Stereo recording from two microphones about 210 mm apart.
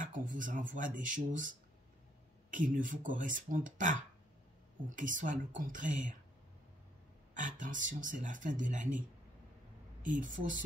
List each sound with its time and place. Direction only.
0.0 s speech: 40° right (ahead or behind)
2.5 s speech: 40° right (ahead or behind)
7.3 s speech: 40° right (ahead or behind)
10.0 s speech: 40° right (ahead or behind)